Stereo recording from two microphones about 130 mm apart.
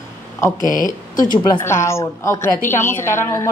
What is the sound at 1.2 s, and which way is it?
Speech, 30° left (ahead or behind).